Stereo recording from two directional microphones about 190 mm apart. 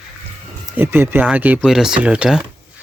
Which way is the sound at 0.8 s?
10° right (ahead or behind).